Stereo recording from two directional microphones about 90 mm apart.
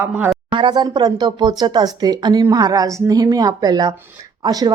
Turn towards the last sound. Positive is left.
turn(degrees=-45)  # may be behind; listen again after turning